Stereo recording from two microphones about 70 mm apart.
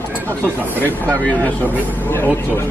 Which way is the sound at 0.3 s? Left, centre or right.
Left.